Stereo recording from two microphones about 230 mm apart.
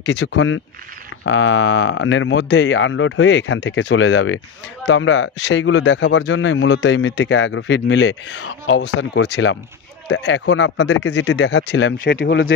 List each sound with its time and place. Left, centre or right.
0.0 s speech: left